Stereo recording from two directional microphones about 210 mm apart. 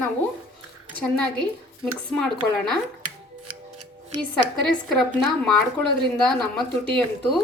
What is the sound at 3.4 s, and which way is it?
Scissors, 90° right.